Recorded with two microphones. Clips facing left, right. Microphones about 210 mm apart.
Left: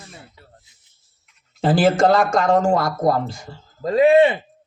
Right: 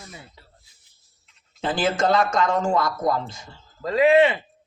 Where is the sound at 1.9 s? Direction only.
50° left (ahead or behind); by 4.3 s 30° left (ahead or behind).